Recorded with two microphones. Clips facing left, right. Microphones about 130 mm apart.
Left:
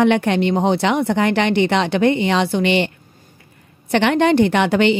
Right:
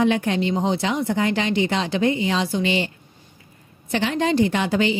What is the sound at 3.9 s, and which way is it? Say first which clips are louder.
A woman's voice: left 6 dB; 70° left (ahead or behind).